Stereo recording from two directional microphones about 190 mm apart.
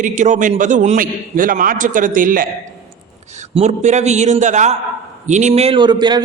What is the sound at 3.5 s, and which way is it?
A man's voice, 35° right (ahead or behind).